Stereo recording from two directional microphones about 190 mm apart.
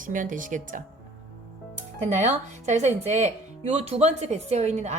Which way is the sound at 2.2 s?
40° right (ahead or behind).